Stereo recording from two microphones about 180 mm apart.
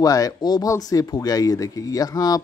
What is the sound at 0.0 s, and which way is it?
A man's voice, 20° left (ahead or behind).